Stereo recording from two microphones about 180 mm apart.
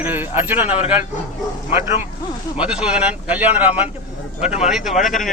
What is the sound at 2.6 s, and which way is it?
Speech, 5° right (ahead or behind).